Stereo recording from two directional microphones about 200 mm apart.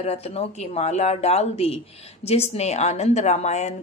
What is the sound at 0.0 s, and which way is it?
A woman's voice, 30° left (ahead or behind).